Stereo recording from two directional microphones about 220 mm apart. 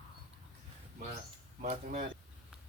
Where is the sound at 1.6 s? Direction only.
30° right (ahead or behind).